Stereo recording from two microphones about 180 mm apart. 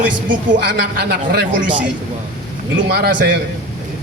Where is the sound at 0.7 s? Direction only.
60° right (ahead or behind).